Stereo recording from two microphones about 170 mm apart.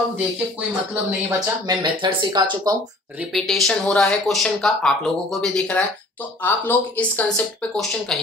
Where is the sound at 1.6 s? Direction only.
30° right (ahead or behind).